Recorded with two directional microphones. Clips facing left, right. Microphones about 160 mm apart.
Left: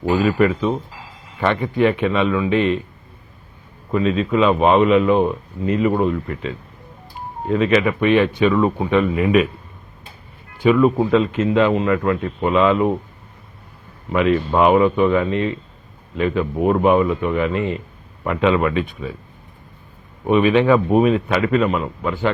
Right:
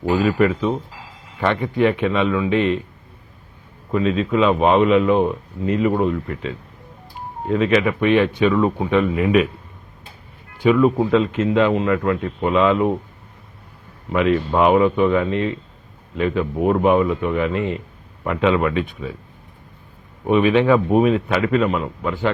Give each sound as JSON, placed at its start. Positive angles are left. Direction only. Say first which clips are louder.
{"t": 0.0, "sound": "a man's voice", "louder": "left 1 dB", "side_deg": 20}
{"t": 3.9, "sound": "a man's voice", "louder": "left 1 dB", "side_deg": 20}
{"t": 7.5, "sound": "a man's voice", "louder": "left 1 dB", "side_deg": 15}
{"t": 10.6, "sound": "a man's voice", "louder": "left 1 dB", "side_deg": 20}
{"t": 14.1, "sound": "a man's voice", "louder": "left 1 dB", "side_deg": 20}
{"t": 20.2, "sound": "a man's voice", "louder": "left 1 dB", "side_deg": 15}